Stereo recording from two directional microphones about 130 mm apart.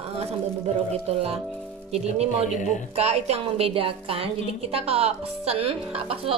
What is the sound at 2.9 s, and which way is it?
A woman's voice, 55° right (ahead or behind).